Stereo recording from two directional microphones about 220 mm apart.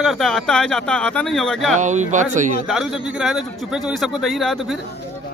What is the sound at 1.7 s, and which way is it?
Speech, 35° right (ahead or behind).